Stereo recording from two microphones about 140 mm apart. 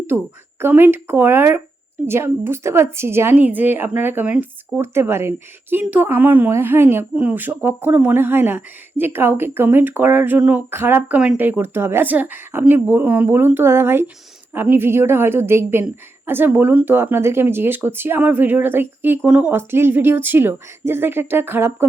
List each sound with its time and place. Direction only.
0.6 s speech: 15° right (ahead or behind)